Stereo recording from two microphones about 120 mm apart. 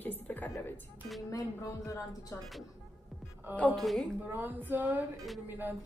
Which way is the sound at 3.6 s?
10° left (ahead or behind).